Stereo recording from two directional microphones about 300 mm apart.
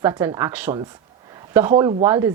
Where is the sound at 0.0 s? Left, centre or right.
Centre.